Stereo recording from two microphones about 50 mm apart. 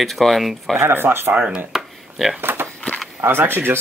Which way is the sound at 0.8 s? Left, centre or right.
Right.